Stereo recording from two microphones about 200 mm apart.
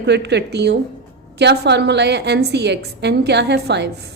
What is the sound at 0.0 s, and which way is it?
A woman's voice, 60° right (ahead or behind).